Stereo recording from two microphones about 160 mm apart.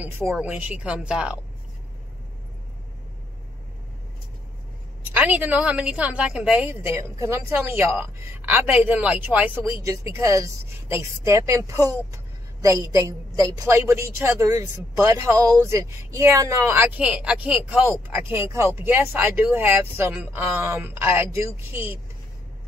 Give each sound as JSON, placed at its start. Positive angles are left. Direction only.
{"t": 0.0, "sound": "a woman's voice", "side_deg": -15}
{"t": 5.1, "sound": "a woman's voice", "side_deg": -10}